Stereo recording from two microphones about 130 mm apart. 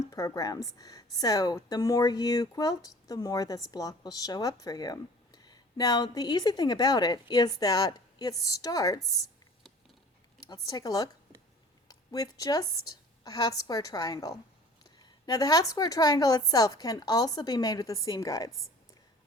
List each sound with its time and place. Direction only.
0.1 s speech: 25° left (ahead or behind)
10.5 s a woman's voice: 30° left (ahead or behind)